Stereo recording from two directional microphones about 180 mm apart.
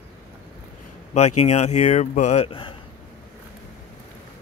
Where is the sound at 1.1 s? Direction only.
40° left (ahead or behind).